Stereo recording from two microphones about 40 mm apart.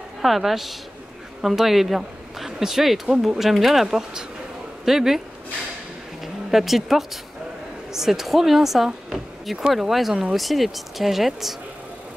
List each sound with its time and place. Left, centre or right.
0.2 s speech: centre
6.2 s speech: centre